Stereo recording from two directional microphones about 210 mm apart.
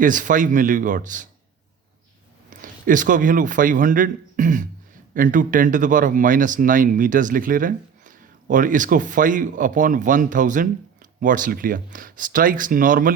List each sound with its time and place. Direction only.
0.0 s speech: 40° right (ahead or behind)
2.5 s a man's voice: 40° right (ahead or behind)